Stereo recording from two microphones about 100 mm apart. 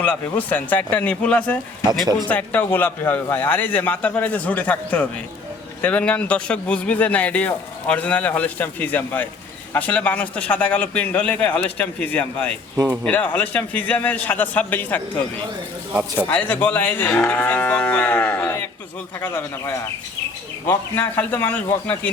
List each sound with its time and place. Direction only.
0.0 s a man's voice: 15° left (ahead or behind)
12.7 s speech: 25° right (ahead or behind)
13.1 s a man's voice: 15° left (ahead or behind)
15.9 s speech: 15° right (ahead or behind)
16.3 s a man's voice: 15° left (ahead or behind)